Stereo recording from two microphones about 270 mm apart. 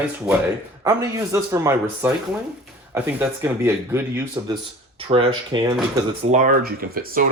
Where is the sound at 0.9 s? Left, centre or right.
Centre.